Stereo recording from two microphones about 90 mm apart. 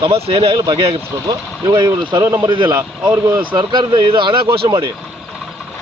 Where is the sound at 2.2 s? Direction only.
30° right (ahead or behind).